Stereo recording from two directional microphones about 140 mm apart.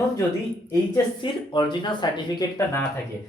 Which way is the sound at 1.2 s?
35° left (ahead or behind).